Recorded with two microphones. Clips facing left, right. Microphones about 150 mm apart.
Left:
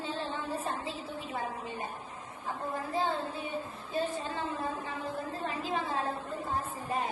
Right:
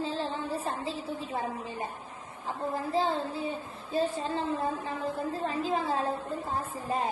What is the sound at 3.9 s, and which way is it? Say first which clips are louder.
A woman's voice: right 4 dB; 30° right (ahead or behind).